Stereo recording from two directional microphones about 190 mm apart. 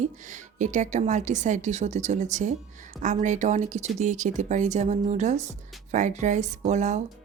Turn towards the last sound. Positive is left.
turn(degrees=-35)  # may be behind; listen again after turning